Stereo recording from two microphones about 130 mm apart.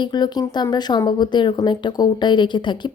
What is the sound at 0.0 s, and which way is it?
Speech, 35° left (ahead or behind).